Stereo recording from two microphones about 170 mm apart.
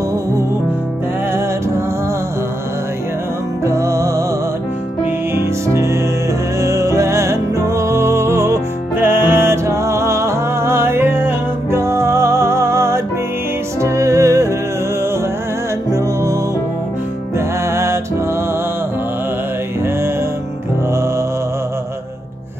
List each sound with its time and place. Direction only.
3.6 s music: 15° right (ahead or behind)
5.3 s music: 15° right (ahead or behind)
15.9 s music: 20° right (ahead or behind)
17.6 s music: 15° right (ahead or behind)